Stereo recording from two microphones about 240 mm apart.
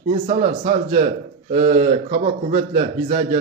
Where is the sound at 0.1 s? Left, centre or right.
Right.